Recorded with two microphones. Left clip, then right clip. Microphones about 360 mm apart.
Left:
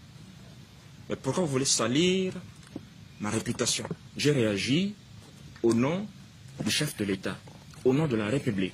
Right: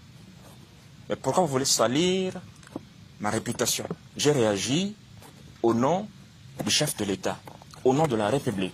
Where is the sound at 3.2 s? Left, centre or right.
Centre.